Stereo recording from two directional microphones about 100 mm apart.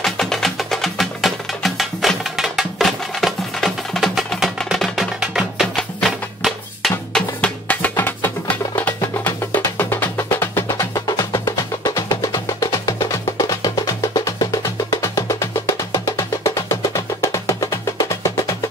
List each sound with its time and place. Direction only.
0.0 s music: 5° left (ahead or behind); by 18.4 s 30° left (ahead or behind)